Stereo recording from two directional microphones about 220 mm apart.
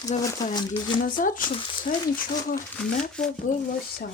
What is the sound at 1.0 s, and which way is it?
A woman's voice, 40° left (ahead or behind).